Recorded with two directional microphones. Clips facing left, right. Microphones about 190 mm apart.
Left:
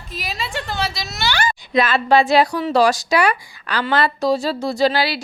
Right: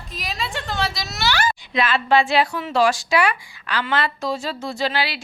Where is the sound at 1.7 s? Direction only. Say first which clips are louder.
Left 4 dB; 40° left (ahead or behind).